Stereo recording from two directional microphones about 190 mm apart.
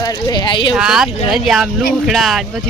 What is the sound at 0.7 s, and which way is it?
Speech, 5° right (ahead or behind).